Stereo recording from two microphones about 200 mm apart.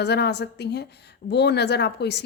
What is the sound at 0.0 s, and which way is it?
A woman's voice, 55° left (ahead or behind).